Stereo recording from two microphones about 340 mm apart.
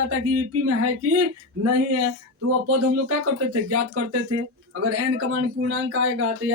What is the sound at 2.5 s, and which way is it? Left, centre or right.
Speech, right.